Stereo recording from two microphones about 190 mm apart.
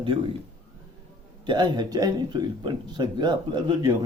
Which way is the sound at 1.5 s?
20° right (ahead or behind).